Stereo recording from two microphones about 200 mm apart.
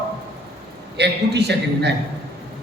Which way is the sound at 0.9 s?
55° right (ahead or behind).